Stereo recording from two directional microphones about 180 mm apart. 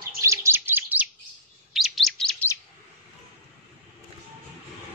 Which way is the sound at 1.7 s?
Centre (ahead or behind).